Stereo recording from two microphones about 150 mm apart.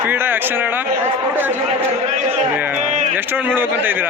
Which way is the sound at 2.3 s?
10° right (ahead or behind).